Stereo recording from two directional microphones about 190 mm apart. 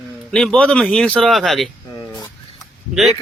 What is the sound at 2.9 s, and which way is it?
Speech, centre (ahead or behind).